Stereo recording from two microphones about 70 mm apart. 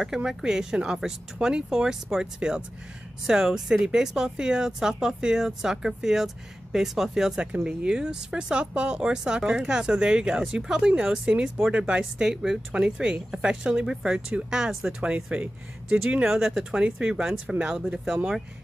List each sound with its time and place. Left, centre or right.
0.0 s speech: centre
16.3 s speech: centre